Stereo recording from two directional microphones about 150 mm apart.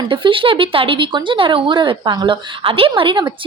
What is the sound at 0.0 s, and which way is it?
Speech, 35° right (ahead or behind).